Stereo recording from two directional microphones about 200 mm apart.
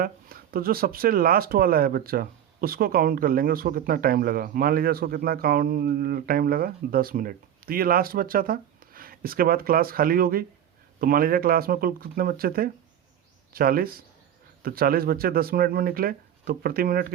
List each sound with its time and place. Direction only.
0.0 s speech: 45° right (ahead or behind)